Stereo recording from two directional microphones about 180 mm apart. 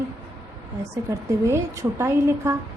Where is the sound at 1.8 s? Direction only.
15° right (ahead or behind).